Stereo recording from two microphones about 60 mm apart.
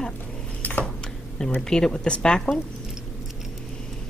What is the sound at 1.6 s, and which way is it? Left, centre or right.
Speech, centre.